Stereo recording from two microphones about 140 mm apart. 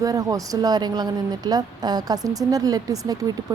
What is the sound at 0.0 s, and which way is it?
Speech, 25° right (ahead or behind).